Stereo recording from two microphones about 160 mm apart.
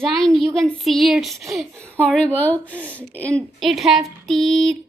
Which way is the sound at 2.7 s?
10° right (ahead or behind).